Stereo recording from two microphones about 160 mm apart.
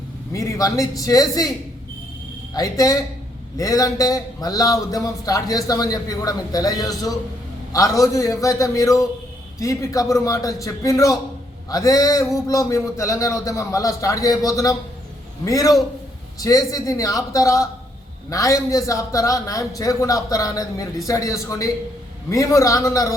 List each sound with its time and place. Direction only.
0.3 s speech: 20° left (ahead or behind)